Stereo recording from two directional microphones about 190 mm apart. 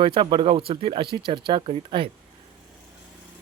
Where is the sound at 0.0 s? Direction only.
25° right (ahead or behind).